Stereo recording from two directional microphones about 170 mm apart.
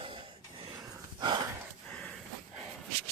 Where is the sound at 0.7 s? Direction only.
20° right (ahead or behind).